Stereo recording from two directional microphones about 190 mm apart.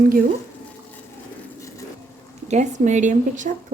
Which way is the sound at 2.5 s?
40° right (ahead or behind).